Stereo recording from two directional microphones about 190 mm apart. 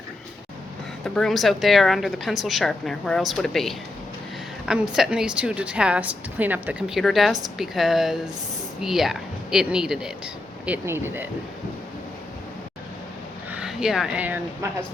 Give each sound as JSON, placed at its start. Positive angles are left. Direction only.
{"t": 1.0, "sound": "a woman's voice", "side_deg": 5}
{"t": 13.5, "sound": "speech", "side_deg": -5}